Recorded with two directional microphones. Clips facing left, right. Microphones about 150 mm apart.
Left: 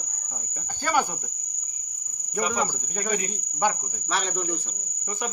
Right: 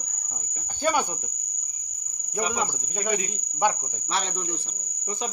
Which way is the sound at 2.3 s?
20° right (ahead or behind).